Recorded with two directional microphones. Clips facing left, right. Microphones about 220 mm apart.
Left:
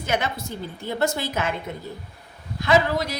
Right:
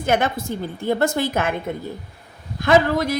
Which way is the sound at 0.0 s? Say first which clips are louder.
Right 5 dB; 50° right (ahead or behind).